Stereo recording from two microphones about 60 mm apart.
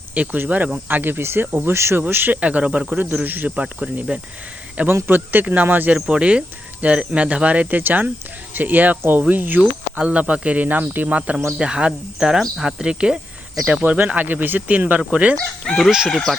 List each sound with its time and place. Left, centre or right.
0.1 s speech: right
2.0 s speech: right
2.4 s speech: right
3.5 s speech: centre
4.9 s speech: right
6.1 s speech: centre; by 10.0 s right
10.0 s speech: right
11.5 s speech: centre
13.8 s speech: right
15.6 s speech: centre